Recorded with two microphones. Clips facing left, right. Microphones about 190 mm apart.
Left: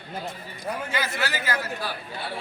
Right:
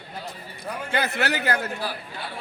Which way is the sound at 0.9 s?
60° right (ahead or behind).